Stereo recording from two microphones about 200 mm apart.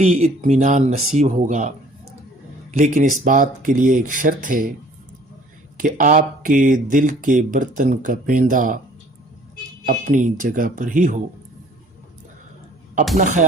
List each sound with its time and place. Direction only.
0.0 s speech: 35° right (ahead or behind)
2.7 s speech: 40° right (ahead or behind)
5.7 s speech: 40° right (ahead or behind)
9.8 s speech: 40° right (ahead or behind)
13.1 s speech: 40° right (ahead or behind)